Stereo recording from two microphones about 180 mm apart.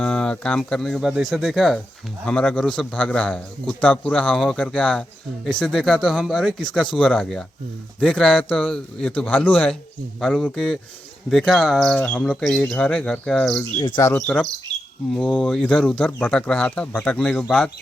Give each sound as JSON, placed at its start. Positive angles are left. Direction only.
{"t": 0.0, "sound": "a man's voice", "side_deg": 5}
{"t": 13.7, "sound": "speech", "side_deg": 20}
{"t": 14.1, "sound": "a man's voice", "side_deg": 5}